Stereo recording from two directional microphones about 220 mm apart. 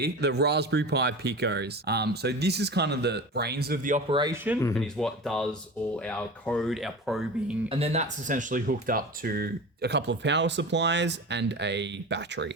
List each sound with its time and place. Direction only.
0.0 s speech: 50° right (ahead or behind)
4.1 s speech: 20° right (ahead or behind)
4.8 s speech: centre (ahead or behind)
7.7 s speech: 25° right (ahead or behind); by 12.5 s 50° right (ahead or behind)